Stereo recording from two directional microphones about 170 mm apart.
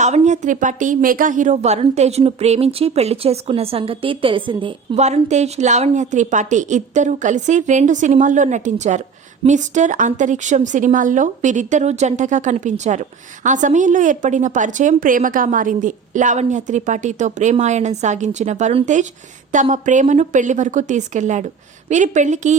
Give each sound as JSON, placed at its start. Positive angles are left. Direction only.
{"t": 0.0, "sound": "a woman's voice", "side_deg": -45}
{"t": 4.9, "sound": "a woman's voice", "side_deg": -40}